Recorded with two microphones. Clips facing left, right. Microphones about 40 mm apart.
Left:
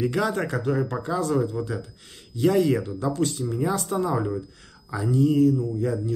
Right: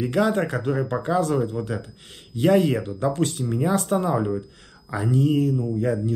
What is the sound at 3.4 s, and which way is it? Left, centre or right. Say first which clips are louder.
Speech: right 2 dB; right.